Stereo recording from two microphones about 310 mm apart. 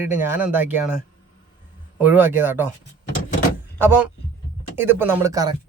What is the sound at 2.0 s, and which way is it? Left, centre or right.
Speech, centre.